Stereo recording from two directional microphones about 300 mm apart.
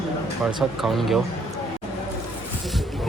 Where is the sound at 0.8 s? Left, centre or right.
Centre.